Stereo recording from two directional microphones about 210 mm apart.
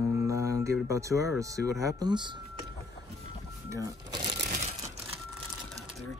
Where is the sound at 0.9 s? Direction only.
15° right (ahead or behind).